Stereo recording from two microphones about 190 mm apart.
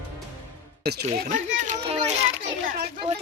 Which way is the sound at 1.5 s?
40° right (ahead or behind).